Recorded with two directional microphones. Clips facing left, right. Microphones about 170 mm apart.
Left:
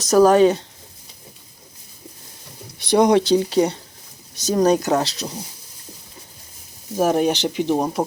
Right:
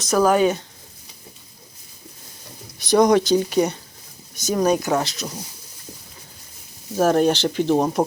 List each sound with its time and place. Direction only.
0.0 s speech: 40° left (ahead or behind)
2.7 s speech: 30° left (ahead or behind)
6.9 s speech: 15° left (ahead or behind)